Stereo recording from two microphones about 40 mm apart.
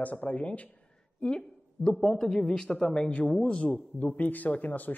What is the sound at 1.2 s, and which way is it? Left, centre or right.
Speech, left.